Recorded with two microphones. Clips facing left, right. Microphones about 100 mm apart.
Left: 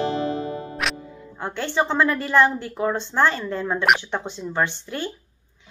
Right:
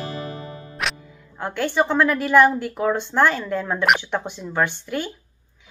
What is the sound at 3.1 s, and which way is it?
Speech, 15° left (ahead or behind).